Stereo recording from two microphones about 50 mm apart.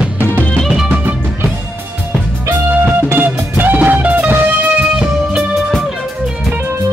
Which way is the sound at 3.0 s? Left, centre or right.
Right.